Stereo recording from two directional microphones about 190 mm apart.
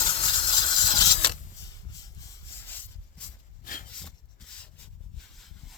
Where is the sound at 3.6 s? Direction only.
45° left (ahead or behind).